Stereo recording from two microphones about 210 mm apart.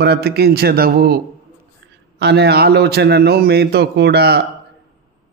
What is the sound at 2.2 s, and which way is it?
A man's voice, 50° right (ahead or behind).